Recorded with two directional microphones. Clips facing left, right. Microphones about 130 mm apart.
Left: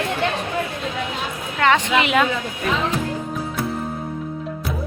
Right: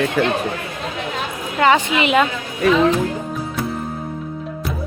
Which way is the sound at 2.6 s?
85° right.